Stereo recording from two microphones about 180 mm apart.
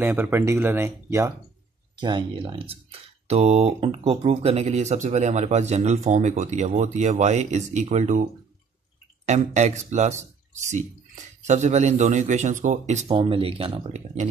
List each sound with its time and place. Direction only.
0.0 s speech: 10° right (ahead or behind)
2.0 s speech: 25° right (ahead or behind); by 8.2 s 40° right (ahead or behind)
9.2 s speech: 40° right (ahead or behind)